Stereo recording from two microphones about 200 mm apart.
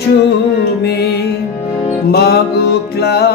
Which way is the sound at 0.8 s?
55° left (ahead or behind).